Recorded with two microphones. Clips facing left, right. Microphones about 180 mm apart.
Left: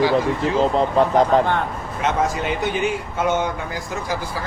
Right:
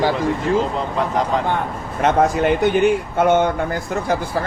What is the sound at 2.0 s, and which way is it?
Speech, 55° right (ahead or behind).